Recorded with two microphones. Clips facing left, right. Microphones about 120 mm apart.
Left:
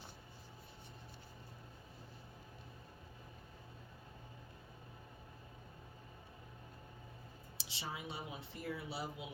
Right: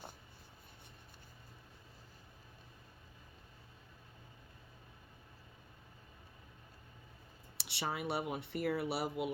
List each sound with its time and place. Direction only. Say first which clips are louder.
7.6 s speech: right 7 dB; 70° right (ahead or behind)